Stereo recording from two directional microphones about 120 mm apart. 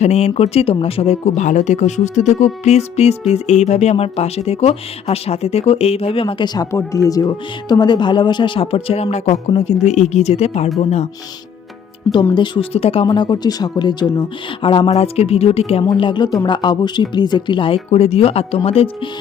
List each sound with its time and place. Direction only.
0.0 s speech: 65° left (ahead or behind); by 6.7 s 35° left (ahead or behind)
6.7 s speech: 25° left (ahead or behind); by 10.7 s 65° left (ahead or behind)
12.3 s speech: 40° left (ahead or behind)
12.7 s speech: 55° left (ahead or behind)
14.8 s speech: 60° left (ahead or behind)
15.9 s speech: 40° left (ahead or behind)
17.9 s speech: 60° left (ahead or behind)